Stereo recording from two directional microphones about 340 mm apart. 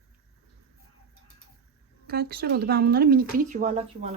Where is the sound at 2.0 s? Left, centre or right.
Right.